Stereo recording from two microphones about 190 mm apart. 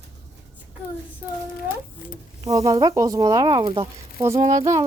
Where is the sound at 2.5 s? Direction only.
15° right (ahead or behind).